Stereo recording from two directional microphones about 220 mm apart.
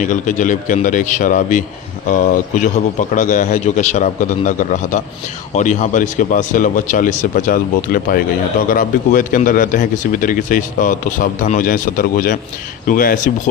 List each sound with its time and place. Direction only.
0.0 s a man's voice: 35° left (ahead or behind)